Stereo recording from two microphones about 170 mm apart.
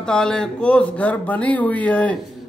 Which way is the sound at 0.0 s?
5° left (ahead or behind).